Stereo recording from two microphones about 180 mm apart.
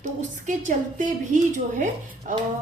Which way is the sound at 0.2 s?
45° right (ahead or behind).